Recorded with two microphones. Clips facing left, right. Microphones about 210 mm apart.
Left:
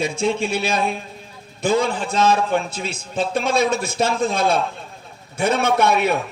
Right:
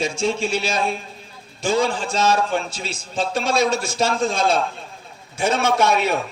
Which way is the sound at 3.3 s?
55° left (ahead or behind).